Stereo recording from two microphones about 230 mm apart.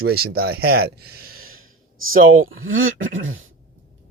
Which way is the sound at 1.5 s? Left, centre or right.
Right.